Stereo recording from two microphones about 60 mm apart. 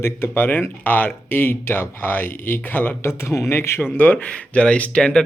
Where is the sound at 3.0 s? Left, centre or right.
Left.